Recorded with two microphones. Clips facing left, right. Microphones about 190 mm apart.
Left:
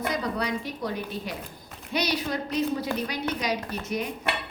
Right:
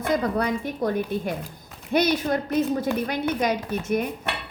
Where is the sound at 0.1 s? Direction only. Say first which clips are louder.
Right 10 dB; 50° right (ahead or behind).